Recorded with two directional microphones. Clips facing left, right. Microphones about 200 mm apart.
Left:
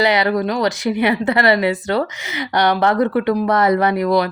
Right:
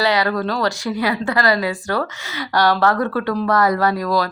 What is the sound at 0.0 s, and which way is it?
A woman's voice, 20° left (ahead or behind).